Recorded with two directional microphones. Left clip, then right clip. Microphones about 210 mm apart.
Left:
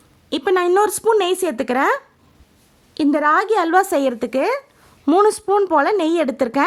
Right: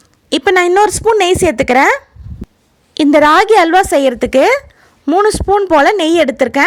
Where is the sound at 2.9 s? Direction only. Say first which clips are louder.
Right 8 dB; 20° right (ahead or behind).